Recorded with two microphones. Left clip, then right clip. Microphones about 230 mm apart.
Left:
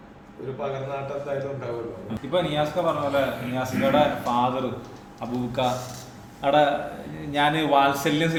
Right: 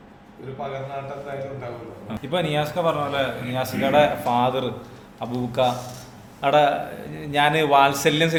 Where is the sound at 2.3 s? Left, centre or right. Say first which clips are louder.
Even; right.